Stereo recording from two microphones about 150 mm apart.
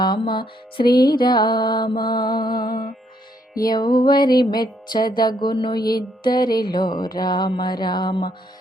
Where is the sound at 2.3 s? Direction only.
75° left (ahead or behind).